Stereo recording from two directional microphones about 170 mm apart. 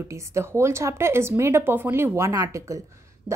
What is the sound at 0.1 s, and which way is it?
A woman's voice, 15° right (ahead or behind).